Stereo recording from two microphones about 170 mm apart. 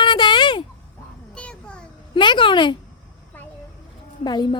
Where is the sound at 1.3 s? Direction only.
5° left (ahead or behind).